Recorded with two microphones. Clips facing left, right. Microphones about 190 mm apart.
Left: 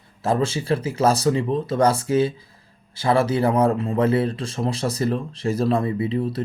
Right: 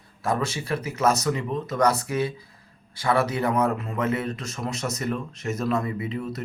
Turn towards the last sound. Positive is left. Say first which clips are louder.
# left 6 dB
turn(degrees=30)  # may be behind; listen again after turning